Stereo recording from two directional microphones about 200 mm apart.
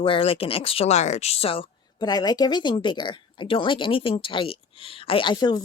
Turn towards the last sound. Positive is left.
turn(degrees=20)  # may be behind; listen again after turning